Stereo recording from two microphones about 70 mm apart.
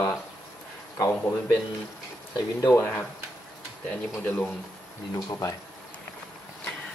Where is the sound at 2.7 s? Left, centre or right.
Left.